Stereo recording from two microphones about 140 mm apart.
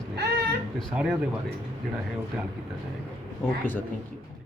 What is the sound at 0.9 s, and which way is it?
Speech, 5° right (ahead or behind).